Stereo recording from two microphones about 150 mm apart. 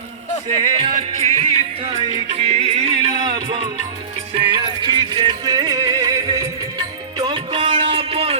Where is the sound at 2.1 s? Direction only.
45° right (ahead or behind).